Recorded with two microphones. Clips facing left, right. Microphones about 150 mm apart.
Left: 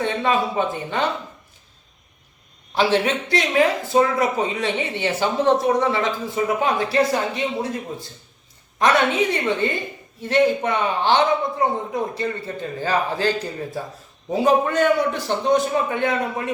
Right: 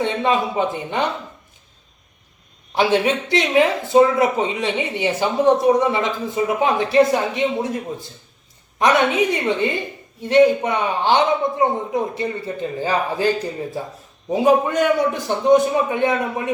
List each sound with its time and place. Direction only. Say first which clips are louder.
0.0 s speech: right 2 dB; 20° right (ahead or behind)
2.7 s speech: right 2 dB; 15° right (ahead or behind)